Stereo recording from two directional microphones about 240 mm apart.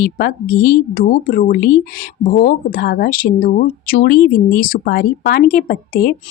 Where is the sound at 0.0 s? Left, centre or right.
Left.